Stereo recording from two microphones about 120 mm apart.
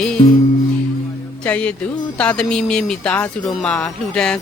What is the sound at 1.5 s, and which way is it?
Speech, 10° left (ahead or behind).